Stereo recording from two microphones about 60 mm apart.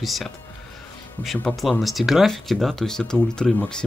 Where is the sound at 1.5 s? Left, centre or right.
Centre.